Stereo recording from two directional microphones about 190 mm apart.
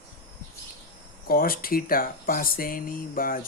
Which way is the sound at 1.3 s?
50° left (ahead or behind).